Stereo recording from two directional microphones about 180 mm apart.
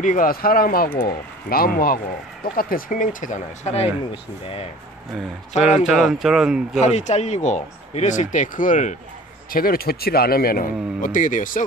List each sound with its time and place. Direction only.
0.0 s speech: 45° left (ahead or behind)
5.6 s speech: 5° right (ahead or behind)
6.8 s speech: 40° left (ahead or behind)